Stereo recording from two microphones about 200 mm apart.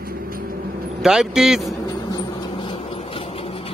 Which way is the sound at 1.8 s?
20° left (ahead or behind).